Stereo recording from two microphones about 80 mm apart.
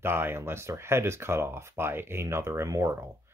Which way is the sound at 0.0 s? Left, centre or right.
Right.